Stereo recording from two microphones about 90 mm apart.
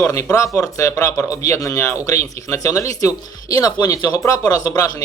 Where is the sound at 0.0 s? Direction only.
30° left (ahead or behind).